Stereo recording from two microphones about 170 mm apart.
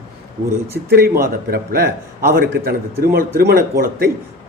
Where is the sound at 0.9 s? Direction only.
60° right (ahead or behind).